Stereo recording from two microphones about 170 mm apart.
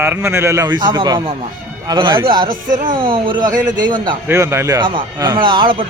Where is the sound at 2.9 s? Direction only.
30° right (ahead or behind).